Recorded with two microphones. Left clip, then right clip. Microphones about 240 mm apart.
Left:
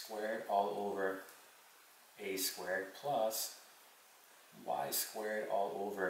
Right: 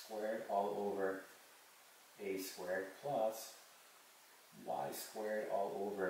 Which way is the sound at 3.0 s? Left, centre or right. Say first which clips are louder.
Left 3 dB; right.